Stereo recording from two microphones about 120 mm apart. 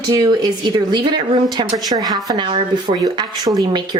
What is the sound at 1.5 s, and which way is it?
Speech, 35° right (ahead or behind).